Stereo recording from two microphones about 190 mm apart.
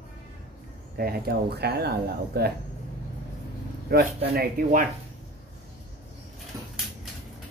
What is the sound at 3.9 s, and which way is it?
Speech, 55° right (ahead or behind).